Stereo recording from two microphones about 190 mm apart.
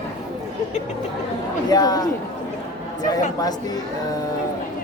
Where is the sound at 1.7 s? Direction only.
20° left (ahead or behind).